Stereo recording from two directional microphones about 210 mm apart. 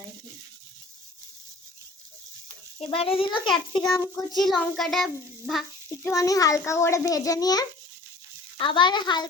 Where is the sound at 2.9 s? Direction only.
25° left (ahead or behind).